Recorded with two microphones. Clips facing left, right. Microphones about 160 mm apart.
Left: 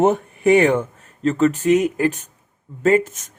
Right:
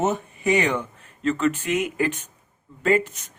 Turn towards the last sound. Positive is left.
turn(degrees=45)  # may be behind; listen again after turning